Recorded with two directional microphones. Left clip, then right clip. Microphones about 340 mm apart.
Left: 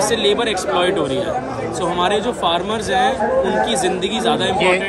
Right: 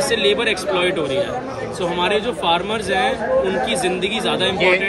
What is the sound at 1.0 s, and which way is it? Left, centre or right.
Speech, left.